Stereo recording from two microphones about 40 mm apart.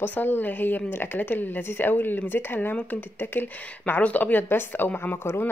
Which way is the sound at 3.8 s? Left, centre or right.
Left.